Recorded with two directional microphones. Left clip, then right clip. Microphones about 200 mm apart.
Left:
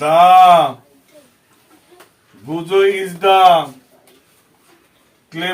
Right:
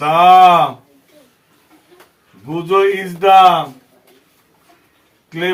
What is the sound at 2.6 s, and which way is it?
Speech, 15° left (ahead or behind).